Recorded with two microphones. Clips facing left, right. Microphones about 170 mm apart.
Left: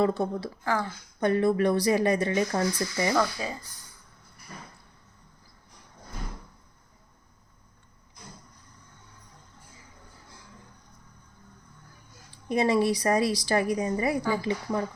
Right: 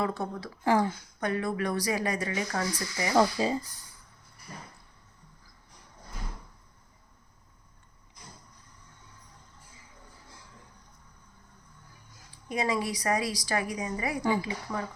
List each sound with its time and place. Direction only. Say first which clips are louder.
0.0 s speech: left 6 dB; 30° left (ahead or behind)
0.6 s speech: right 5 dB; 30° right (ahead or behind)
1.2 s speech: left 7 dB; 30° left (ahead or behind)
3.2 s speech: right 3 dB; 25° right (ahead or behind)
12.5 s a woman's voice: left 6 dB; 30° left (ahead or behind)